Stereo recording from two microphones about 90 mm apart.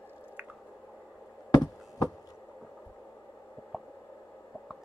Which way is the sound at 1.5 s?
45° left (ahead or behind).